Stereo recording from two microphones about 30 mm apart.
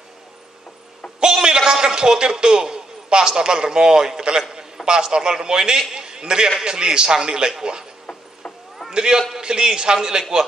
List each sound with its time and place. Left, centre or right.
1.2 s a man's voice: right
4.4 s a sound: centre
4.8 s a man's voice: right
8.9 s a man's voice: right